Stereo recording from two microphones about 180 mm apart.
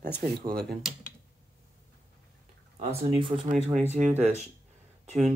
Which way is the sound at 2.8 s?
35° right (ahead or behind).